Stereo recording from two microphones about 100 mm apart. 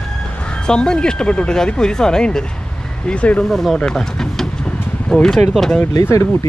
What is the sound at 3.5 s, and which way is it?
Speech, centre (ahead or behind).